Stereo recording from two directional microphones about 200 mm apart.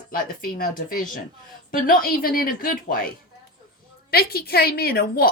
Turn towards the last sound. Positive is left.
turn(degrees=50)  # may be behind; listen again after turning